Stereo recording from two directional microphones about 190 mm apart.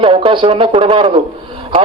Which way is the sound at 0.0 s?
25° right (ahead or behind).